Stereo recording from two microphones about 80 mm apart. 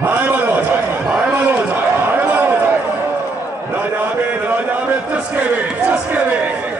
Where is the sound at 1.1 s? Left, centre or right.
Centre.